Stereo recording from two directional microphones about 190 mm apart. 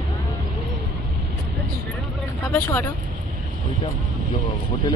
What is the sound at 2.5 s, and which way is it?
Vehicle, 10° left (ahead or behind).